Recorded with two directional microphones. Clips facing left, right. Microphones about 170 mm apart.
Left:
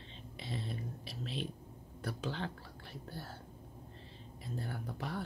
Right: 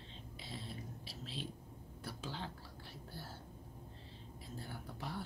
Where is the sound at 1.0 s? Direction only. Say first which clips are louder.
Left 5 dB; 60° left (ahead or behind).